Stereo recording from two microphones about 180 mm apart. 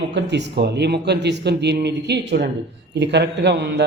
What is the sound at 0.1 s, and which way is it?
A man's voice, 75° right (ahead or behind).